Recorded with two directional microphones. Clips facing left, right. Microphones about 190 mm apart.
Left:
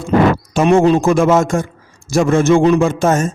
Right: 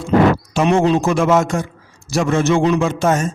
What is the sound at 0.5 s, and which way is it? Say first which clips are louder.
A man's voice: left 4 dB; 45° left (ahead or behind).